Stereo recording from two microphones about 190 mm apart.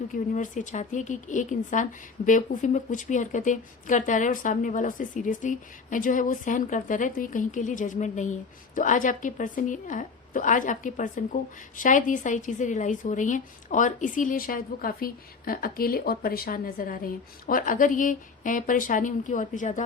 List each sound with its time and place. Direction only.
0.1 s speech: 40° left (ahead or behind)